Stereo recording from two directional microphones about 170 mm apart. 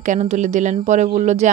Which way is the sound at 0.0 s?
45° right (ahead or behind).